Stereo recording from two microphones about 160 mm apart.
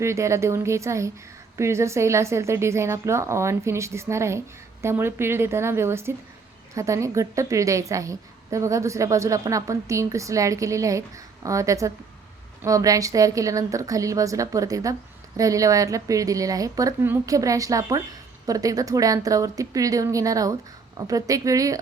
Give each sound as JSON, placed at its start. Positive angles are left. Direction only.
{"t": 0.0, "sound": "a woman's voice", "side_deg": -20}